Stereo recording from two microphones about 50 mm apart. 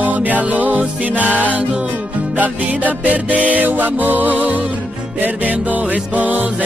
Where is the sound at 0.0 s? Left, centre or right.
Right.